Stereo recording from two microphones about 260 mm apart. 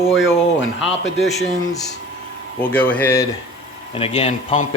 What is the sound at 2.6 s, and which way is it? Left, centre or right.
Speech, centre.